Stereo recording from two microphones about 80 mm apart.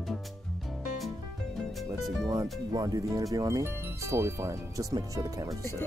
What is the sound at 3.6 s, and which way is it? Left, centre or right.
Speech, right.